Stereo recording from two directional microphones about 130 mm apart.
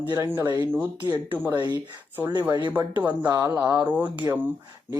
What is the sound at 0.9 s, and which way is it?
Speech, 35° right (ahead or behind).